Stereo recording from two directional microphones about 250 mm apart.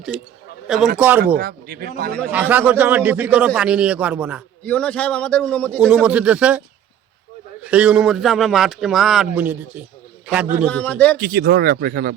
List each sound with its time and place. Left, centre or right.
0.9 s speech: centre
1.2 s speech: right
2.3 s a man's voice: centre
7.6 s a man's voice: centre
10.7 s a man's voice: centre
11.2 s speech: right